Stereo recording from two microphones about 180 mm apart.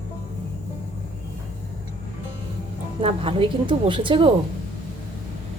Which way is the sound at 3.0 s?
30° right (ahead or behind).